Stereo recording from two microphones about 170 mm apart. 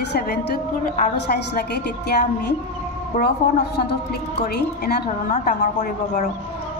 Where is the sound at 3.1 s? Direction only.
50° left (ahead or behind).